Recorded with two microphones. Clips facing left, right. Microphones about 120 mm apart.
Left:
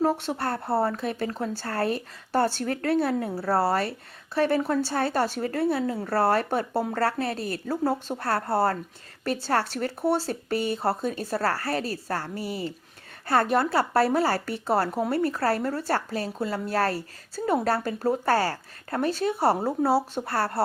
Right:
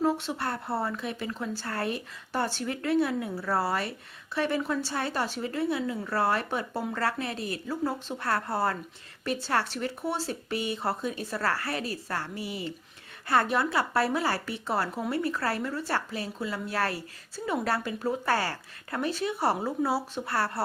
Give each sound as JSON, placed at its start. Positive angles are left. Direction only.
{"t": 0.0, "sound": "speech", "side_deg": 40}